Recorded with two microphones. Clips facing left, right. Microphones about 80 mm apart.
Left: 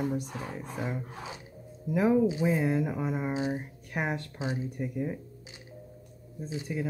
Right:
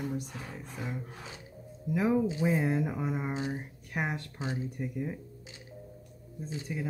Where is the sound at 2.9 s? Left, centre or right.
Centre.